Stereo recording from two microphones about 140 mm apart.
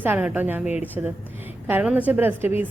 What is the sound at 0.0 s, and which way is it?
A woman's voice, 10° right (ahead or behind).